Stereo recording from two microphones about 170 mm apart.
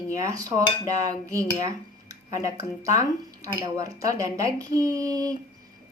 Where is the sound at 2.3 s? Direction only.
20° right (ahead or behind).